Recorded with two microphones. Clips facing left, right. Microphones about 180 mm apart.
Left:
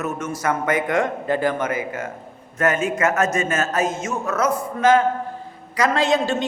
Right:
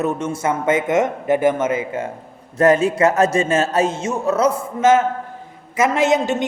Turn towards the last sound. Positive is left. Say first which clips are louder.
# right 3 dB
turn(degrees=-20)  # may be behind; listen again after turning